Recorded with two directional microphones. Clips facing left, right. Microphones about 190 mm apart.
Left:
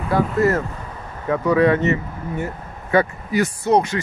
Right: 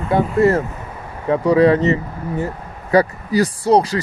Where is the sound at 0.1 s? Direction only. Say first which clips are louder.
Right 3 dB; 30° right (ahead or behind).